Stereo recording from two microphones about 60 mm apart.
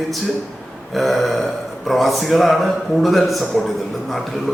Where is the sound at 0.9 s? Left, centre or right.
Centre.